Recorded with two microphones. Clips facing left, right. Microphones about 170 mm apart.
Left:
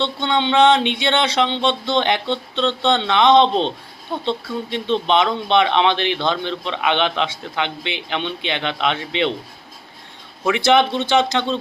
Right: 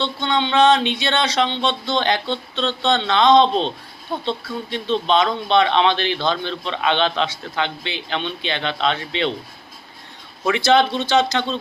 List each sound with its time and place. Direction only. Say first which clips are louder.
0.0 s a man's voice: left 1 dB; 25° left (ahead or behind)
10.4 s speech: left 1 dB; 15° left (ahead or behind)